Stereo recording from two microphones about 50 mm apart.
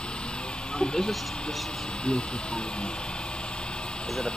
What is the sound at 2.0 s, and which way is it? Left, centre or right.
Speech, centre.